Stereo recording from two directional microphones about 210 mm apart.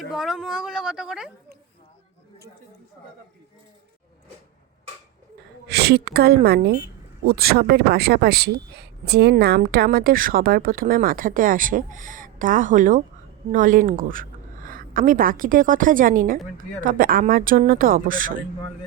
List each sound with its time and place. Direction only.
0.1 s speech: centre (ahead or behind)
5.6 s a woman's voice: 50° right (ahead or behind)